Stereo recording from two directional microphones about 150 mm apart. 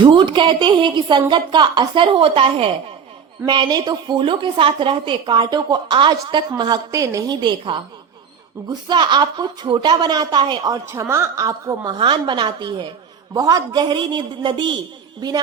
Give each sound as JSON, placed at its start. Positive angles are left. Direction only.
{"t": 0.0, "sound": "a woman's voice", "side_deg": -30}
{"t": 8.9, "sound": "a woman's voice", "side_deg": -30}